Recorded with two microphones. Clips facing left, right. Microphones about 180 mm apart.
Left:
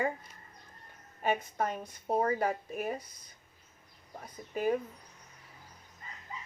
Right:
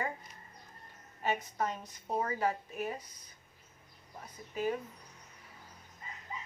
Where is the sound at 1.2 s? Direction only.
55° left (ahead or behind).